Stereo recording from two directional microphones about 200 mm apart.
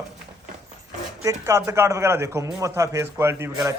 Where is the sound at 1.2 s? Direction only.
15° right (ahead or behind).